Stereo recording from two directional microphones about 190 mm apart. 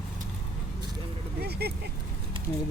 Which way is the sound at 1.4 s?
55° right (ahead or behind).